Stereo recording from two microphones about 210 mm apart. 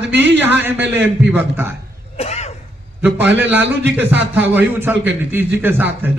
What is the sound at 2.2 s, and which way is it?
Speech, 30° left (ahead or behind).